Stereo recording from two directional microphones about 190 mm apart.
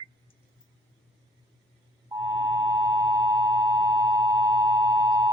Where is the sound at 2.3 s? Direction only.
20° right (ahead or behind).